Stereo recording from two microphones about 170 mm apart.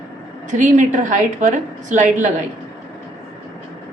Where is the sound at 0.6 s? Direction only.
45° right (ahead or behind).